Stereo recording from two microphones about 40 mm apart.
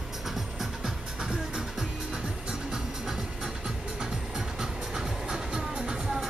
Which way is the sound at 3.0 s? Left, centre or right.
Centre.